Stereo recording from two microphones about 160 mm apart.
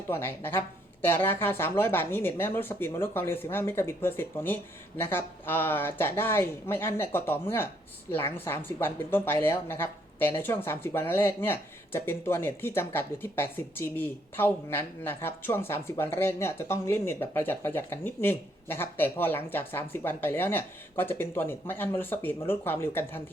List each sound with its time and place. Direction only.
0.1 s speech: 15° left (ahead or behind)